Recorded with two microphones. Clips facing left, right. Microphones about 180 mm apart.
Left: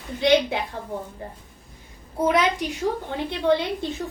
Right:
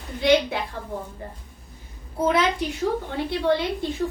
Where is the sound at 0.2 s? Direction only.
20° left (ahead or behind).